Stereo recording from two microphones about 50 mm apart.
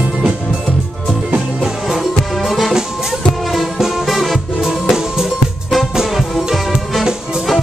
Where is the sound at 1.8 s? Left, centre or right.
Centre.